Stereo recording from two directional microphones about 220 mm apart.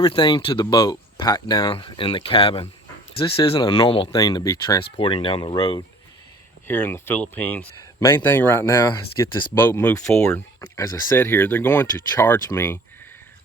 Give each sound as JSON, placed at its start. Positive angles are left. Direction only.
{"t": 0.0, "sound": "speech", "side_deg": 20}
{"t": 4.8, "sound": "speech", "side_deg": 25}
{"t": 6.7, "sound": "speech", "side_deg": 10}